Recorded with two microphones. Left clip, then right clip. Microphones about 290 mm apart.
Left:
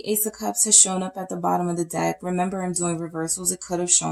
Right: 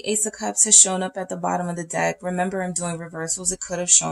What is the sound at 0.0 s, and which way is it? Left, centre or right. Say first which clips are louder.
Speech: right 1 dB; right.